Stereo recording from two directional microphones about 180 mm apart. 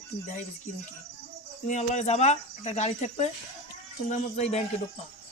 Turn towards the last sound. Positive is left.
turn(degrees=35)  # may be behind; listen again after turning